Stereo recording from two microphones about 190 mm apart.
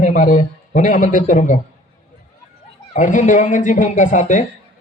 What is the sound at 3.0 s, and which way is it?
Speech, 40° left (ahead or behind).